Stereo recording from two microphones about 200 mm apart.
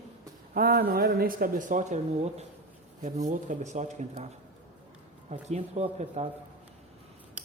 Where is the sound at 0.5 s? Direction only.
50° right (ahead or behind).